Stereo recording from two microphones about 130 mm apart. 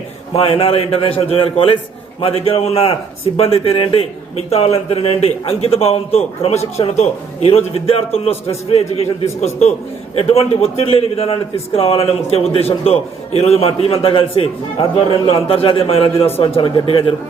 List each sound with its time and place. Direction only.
0.3 s a man's voice: 45° left (ahead or behind)